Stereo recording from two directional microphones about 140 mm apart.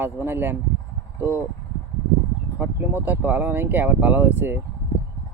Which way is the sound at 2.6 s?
15° right (ahead or behind).